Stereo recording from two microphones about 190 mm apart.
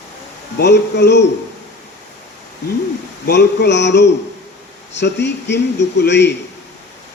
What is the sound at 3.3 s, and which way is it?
Speech, 65° left (ahead or behind).